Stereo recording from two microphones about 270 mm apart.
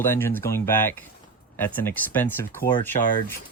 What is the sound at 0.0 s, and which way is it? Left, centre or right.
Speech, centre.